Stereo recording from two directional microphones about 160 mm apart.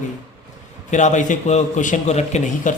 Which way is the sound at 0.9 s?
50° left (ahead or behind).